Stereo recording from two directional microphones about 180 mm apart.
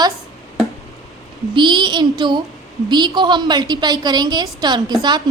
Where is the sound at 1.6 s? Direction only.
25° right (ahead or behind).